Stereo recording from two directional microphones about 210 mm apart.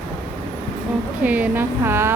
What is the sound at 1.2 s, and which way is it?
Speech, 5° right (ahead or behind).